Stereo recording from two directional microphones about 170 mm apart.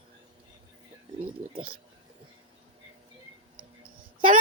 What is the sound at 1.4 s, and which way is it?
Speech, 45° right (ahead or behind).